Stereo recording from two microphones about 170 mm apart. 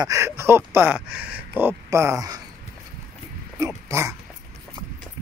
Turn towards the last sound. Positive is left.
turn(degrees=-15)  # may be behind; listen again after turning